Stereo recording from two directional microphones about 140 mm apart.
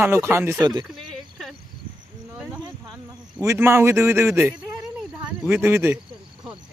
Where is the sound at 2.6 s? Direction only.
25° right (ahead or behind).